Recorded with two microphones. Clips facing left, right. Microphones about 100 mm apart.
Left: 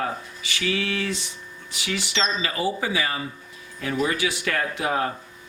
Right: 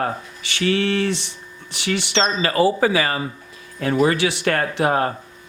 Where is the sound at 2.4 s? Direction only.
80° right.